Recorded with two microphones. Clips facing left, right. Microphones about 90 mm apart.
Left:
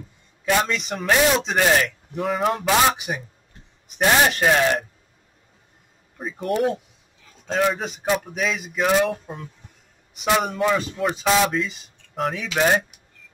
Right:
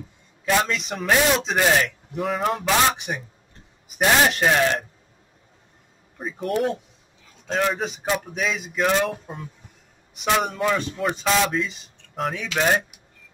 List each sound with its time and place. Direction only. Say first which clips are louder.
0.5 s speech: left 1 dB; centre (ahead or behind)
6.1 s speech: left 1 dB; centre (ahead or behind)